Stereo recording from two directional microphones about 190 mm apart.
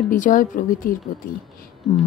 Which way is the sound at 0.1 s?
45° left (ahead or behind).